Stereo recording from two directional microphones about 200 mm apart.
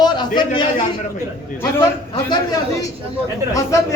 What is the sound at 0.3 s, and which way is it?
Speech, 25° left (ahead or behind).